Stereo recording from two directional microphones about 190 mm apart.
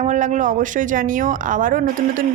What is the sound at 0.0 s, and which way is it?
Speech, 40° right (ahead or behind).